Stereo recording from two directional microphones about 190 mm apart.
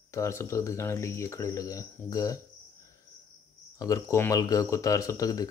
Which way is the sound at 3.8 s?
15° left (ahead or behind).